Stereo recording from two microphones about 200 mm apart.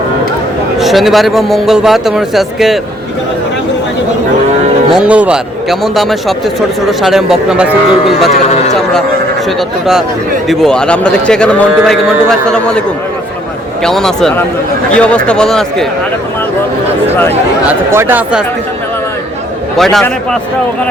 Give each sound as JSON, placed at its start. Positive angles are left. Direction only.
{"t": 0.8, "sound": "a man's voice", "side_deg": 0}
{"t": 4.9, "sound": "a man's voice", "side_deg": -5}
{"t": 9.6, "sound": "a man's voice", "side_deg": 0}
{"t": 13.8, "sound": "a man's voice", "side_deg": 5}
{"t": 17.7, "sound": "speech", "side_deg": -10}
{"t": 19.7, "sound": "a man's voice", "side_deg": 0}